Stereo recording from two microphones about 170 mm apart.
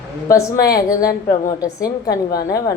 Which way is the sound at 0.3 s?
20° left (ahead or behind).